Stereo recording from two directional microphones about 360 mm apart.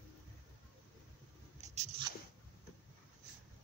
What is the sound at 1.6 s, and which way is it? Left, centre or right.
Biting, centre.